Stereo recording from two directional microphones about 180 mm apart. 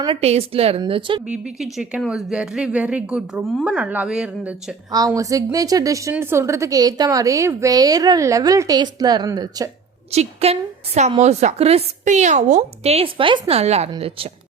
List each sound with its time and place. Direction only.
0.0 s a woman's voice: 30° right (ahead or behind)
1.3 s a woman's voice: 5° right (ahead or behind)
4.9 s a woman's voice: 20° right (ahead or behind)
10.1 s a woman's voice: 35° right (ahead or behind)